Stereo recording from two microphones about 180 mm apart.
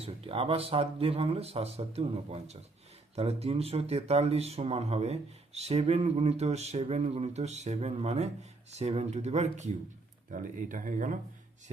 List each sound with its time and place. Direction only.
0.0 s speech: 30° right (ahead or behind)